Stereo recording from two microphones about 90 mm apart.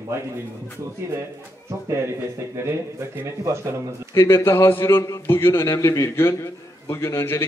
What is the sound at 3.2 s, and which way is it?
Speech, 30° right (ahead or behind).